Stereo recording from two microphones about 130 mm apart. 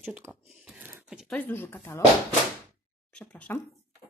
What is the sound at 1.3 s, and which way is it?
Speech, 15° left (ahead or behind).